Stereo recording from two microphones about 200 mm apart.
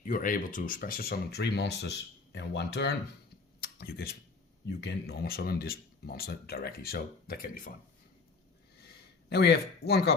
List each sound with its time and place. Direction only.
0.1 s speech: 45° left (ahead or behind); by 2.9 s 60° left (ahead or behind)
3.6 s a sound: 50° left (ahead or behind)
4.6 s speech: 60° left (ahead or behind)
8.9 s speech: 55° left (ahead or behind)